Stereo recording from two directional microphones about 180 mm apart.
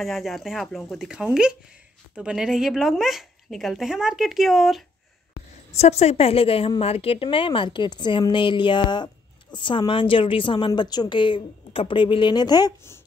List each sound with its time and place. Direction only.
0.0 s speech: centre (ahead or behind)
5.7 s a woman's voice: 35° left (ahead or behind); by 13.0 s 20° left (ahead or behind)